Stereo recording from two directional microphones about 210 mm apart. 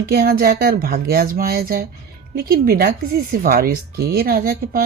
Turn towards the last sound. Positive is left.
turn(degrees=-45)  # may be behind; listen again after turning